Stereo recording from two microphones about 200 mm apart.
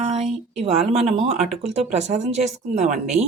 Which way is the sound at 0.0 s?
30° right (ahead or behind).